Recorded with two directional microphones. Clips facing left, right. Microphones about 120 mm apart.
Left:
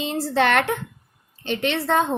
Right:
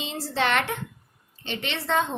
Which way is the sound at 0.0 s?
55° left (ahead or behind).